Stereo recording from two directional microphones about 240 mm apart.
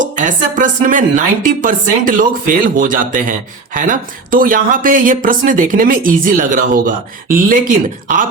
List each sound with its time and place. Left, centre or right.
0.0 s speech: right